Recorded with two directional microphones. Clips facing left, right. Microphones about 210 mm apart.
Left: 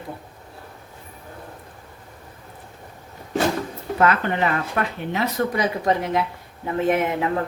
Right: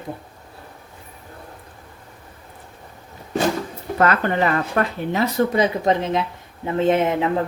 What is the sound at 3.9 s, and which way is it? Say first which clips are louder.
Speech: right 2 dB; 40° right (ahead or behind).